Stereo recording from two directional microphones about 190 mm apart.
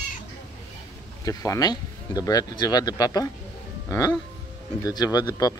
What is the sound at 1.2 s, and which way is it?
Speech, 15° left (ahead or behind).